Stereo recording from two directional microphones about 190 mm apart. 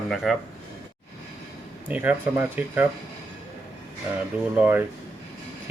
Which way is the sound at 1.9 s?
10° right (ahead or behind).